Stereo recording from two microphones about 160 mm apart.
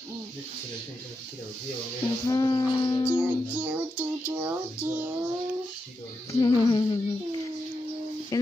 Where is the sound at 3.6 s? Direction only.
10° right (ahead or behind).